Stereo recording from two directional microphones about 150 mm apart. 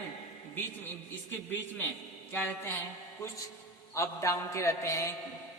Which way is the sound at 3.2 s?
20° left (ahead or behind).